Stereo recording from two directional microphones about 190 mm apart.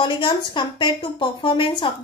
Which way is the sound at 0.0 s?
25° left (ahead or behind).